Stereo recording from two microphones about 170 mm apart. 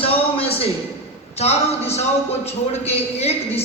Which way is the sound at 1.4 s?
40° left (ahead or behind).